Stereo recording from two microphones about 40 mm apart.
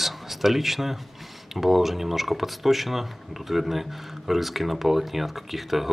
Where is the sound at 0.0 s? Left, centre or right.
Centre.